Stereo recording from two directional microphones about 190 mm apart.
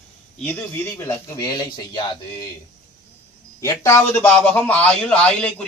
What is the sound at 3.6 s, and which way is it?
A man's voice, 15° left (ahead or behind).